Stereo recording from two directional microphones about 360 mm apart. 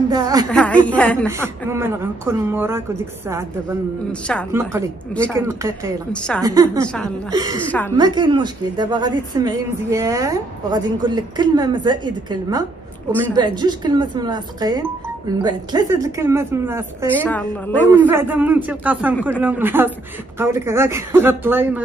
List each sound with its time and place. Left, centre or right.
0.1 s a woman's voice: centre
0.5 s a woman's voice: centre
1.2 s a woman's voice: centre
4.1 s a woman's voice: centre
17.1 s a woman's voice: centre